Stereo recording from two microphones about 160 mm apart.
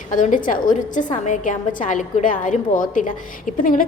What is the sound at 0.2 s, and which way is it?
A woman's voice, 55° left (ahead or behind).